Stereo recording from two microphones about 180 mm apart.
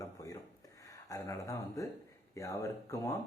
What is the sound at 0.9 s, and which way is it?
Speech, 20° left (ahead or behind).